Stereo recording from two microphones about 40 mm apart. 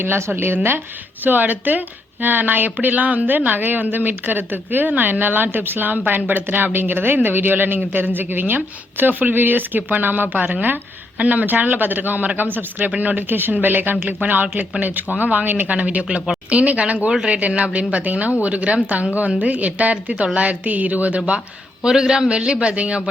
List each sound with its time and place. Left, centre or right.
0.0 s speech: right
1.2 s a man's voice: right
12.9 s speech: right
13.1 s a man's voice: right
14.4 s speech: right
14.8 s speech: right
21.8 s a man's voice: centre